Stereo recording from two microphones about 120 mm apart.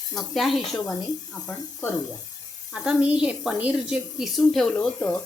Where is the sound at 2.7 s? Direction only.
10° right (ahead or behind).